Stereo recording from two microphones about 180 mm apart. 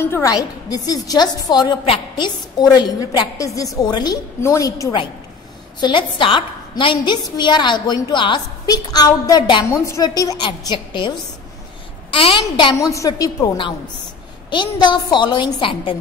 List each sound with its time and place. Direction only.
0.1 s a woman's voice: 20° left (ahead or behind)